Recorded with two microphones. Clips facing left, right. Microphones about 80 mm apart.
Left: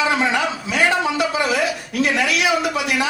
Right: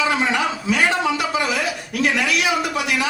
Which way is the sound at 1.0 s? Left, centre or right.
Left.